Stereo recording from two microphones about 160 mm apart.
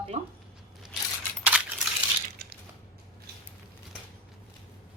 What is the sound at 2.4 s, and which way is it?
Crushing, 80° right.